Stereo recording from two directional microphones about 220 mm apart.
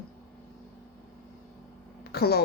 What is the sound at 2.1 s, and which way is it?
Speech, 45° left (ahead or behind).